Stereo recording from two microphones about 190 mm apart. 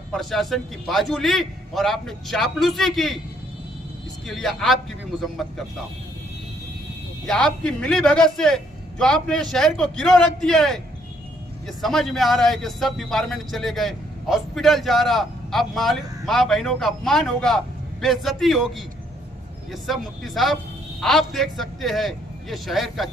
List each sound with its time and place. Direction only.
0.1 s a man's voice: centre (ahead or behind)
4.3 s a man's voice: centre (ahead or behind)
7.2 s a man's voice: 5° left (ahead or behind)
11.8 s a man's voice: centre (ahead or behind)
19.7 s a man's voice: centre (ahead or behind)